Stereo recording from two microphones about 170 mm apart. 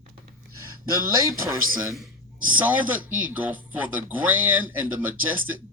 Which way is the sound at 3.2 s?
10° right (ahead or behind).